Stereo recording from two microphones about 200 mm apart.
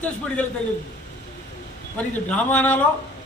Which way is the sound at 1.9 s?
5° left (ahead or behind).